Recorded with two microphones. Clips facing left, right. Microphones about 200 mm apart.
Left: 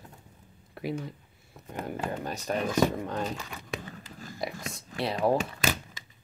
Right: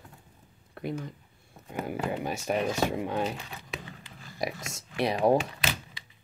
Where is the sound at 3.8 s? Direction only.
45° left (ahead or behind).